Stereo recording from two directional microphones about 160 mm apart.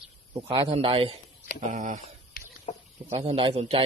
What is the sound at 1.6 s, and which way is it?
Speech, 55° right (ahead or behind).